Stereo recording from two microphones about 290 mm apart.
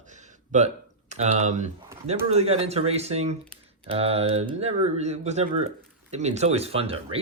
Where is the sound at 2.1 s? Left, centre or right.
Right.